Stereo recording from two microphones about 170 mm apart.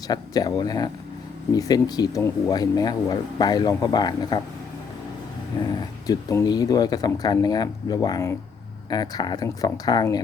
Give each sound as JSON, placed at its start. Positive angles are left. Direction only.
{"t": 0.1, "sound": "speech", "side_deg": 20}
{"t": 5.5, "sound": "speech", "side_deg": 25}